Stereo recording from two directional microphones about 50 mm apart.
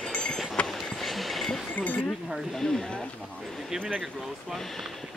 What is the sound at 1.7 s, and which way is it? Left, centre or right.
Speech, left.